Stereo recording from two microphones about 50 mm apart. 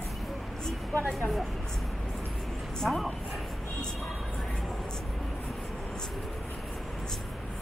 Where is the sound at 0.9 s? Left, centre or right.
Left.